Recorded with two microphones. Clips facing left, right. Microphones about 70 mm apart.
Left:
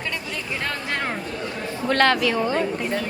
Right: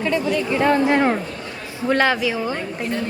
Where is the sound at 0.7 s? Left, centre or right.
Centre.